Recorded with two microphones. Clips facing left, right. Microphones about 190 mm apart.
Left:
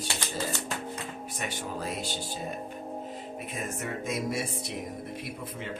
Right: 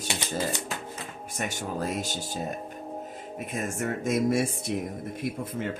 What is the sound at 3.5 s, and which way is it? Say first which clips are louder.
Speech: right 5 dB; 50° right (ahead or behind).